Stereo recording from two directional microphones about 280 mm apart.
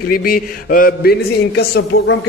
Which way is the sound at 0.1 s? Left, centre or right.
Left.